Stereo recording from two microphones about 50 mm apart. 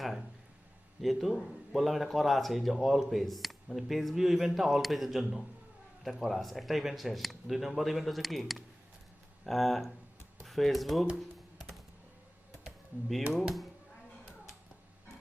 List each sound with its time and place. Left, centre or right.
1.0 s speech: centre
11.5 s music: centre
13.3 s speech: centre